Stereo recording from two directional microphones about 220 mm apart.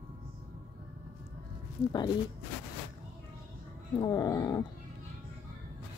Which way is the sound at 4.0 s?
15° left (ahead or behind).